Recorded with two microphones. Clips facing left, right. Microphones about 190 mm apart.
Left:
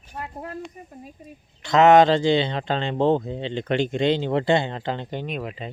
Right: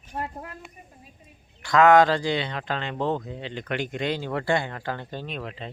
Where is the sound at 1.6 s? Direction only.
25° left (ahead or behind).